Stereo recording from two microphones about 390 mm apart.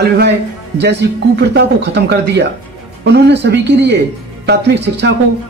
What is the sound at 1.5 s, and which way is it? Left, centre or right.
Speech, right.